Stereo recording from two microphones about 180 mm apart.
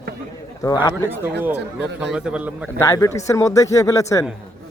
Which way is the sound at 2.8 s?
15° left (ahead or behind).